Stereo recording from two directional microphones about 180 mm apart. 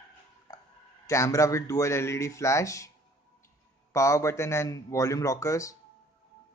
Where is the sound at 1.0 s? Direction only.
15° left (ahead or behind).